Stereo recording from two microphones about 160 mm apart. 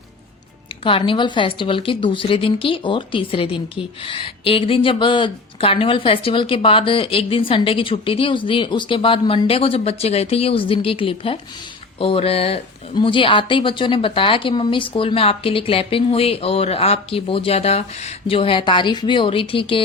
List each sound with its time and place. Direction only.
0.9 s speech: 35° left (ahead or behind)